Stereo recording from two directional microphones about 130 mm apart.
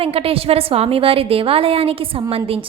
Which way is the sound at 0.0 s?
45° right (ahead or behind).